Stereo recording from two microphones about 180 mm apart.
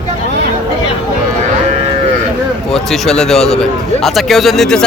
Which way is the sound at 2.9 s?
5° left (ahead or behind).